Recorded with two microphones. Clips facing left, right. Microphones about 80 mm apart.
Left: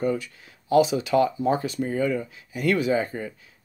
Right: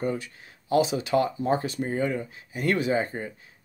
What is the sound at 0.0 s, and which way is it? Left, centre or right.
Speech, right.